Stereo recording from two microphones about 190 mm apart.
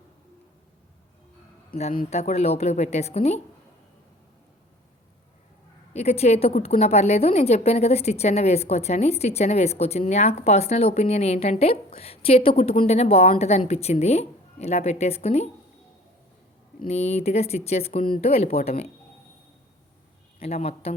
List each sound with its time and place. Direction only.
2.0 s a woman's voice: 35° left (ahead or behind)
5.9 s a woman's voice: 35° left (ahead or behind)
16.8 s a woman's voice: 35° left (ahead or behind)
20.4 s a woman's voice: 35° left (ahead or behind)